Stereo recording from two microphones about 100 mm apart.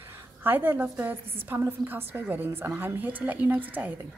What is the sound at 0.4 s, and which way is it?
A woman's voice, 20° right (ahead or behind).